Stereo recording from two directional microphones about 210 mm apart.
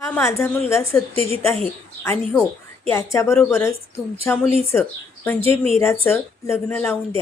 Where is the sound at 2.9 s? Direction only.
15° left (ahead or behind).